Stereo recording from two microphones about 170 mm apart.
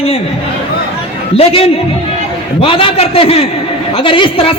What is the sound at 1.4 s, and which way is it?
A man's voice, 35° left (ahead or behind).